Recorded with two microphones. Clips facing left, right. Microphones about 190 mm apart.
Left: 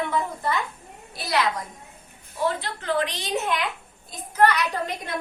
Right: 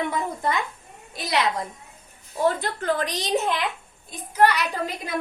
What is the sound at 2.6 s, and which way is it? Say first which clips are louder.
Speech: right 1 dB; 45° right (ahead or behind).